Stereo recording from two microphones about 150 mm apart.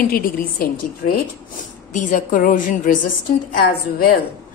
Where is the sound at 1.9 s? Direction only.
55° left (ahead or behind).